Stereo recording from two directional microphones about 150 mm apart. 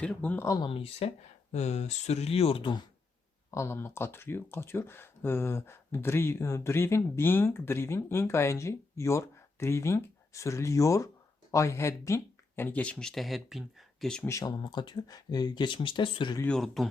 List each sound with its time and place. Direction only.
0.0 s speech: 10° left (ahead or behind)
0.7 s speech: 40° left (ahead or behind)
3.5 s speech: 20° left (ahead or behind); by 14.3 s 5° left (ahead or behind)
14.3 s speech: 25° left (ahead or behind)
16.4 s speech: 5° left (ahead or behind)